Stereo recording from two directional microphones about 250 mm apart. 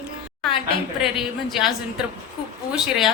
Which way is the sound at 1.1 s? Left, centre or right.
Centre.